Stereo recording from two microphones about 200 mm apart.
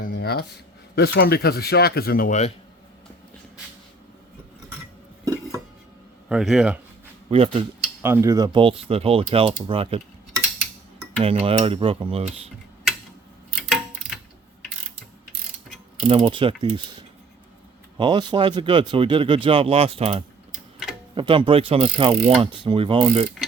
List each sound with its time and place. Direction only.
0.0 s a sound: 55° left (ahead or behind)
0.9 s speech: 55° left (ahead or behind)
6.2 s speech: 5° right (ahead or behind)
7.3 s speech: 30° right (ahead or behind)
8.0 s speech: 15° right (ahead or behind); by 10.0 s 30° right (ahead or behind)
11.2 s speech: 30° right (ahead or behind)
13.7 s a sound: centre (ahead or behind)
16.0 s speech: 25° right (ahead or behind)
17.9 s speech: 25° right (ahead or behind)